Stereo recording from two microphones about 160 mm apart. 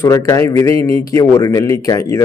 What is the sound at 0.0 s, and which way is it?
A man's voice, 20° left (ahead or behind).